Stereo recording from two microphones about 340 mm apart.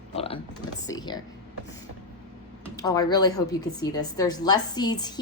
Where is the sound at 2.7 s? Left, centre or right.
Centre.